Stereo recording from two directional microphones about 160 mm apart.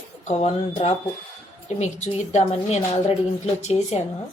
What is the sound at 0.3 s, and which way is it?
A woman's voice, 45° left (ahead or behind).